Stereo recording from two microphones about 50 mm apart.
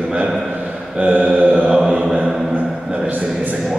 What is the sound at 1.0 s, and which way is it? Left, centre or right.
Mantra, right.